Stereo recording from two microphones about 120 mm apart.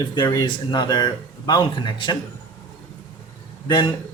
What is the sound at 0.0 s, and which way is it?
Speech, 35° left (ahead or behind).